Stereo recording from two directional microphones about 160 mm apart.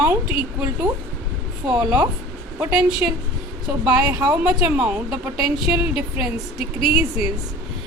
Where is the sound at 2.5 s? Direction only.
10° right (ahead or behind).